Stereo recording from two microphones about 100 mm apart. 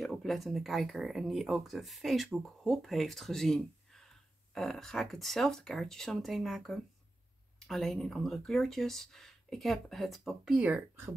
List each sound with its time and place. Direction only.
0.0 s speech: centre (ahead or behind)
10.6 s speech: 20° right (ahead or behind)